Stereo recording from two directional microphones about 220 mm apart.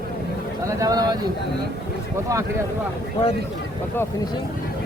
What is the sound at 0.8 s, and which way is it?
Speech, 15° right (ahead or behind).